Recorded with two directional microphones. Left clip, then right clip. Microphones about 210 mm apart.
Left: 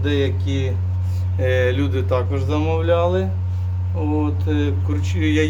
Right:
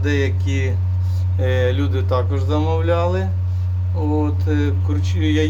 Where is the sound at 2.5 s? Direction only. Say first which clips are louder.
Left 1 dB; 5° right (ahead or behind).